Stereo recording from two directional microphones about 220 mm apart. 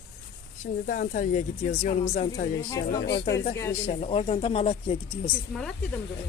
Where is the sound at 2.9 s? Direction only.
45° left (ahead or behind).